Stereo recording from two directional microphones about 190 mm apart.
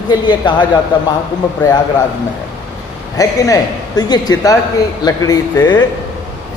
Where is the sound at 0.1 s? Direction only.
20° left (ahead or behind).